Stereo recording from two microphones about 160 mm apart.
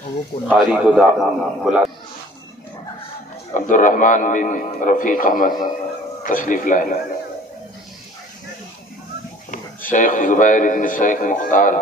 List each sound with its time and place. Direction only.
0.3 s speech: 35° left (ahead or behind)
0.7 s a man's voice: 5° right (ahead or behind)
3.5 s a man's voice: 55° left (ahead or behind)
9.5 s a man's voice: 60° left (ahead or behind)